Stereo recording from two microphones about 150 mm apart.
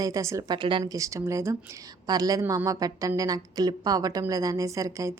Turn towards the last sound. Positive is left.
turn(degrees=-20)  # may be behind; listen again after turning